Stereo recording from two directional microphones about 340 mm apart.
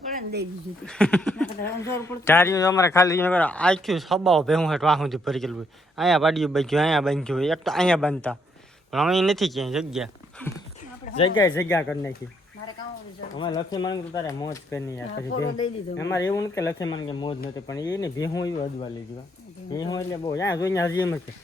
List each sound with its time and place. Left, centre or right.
0.1 s a sound: right
0.9 s speech: centre
11.3 s speech: centre
13.3 s speech: centre
15.3 s speech: left
16.0 s speech: centre